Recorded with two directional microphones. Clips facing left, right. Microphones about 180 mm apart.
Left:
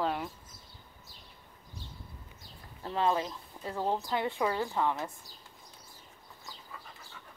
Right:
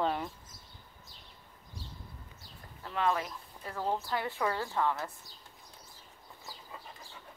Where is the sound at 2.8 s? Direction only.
30° left (ahead or behind).